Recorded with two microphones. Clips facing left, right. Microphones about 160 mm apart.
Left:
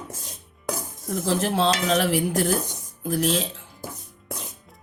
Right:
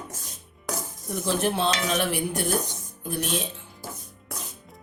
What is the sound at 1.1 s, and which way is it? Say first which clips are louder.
Dishes: left 2 dB; 90° left.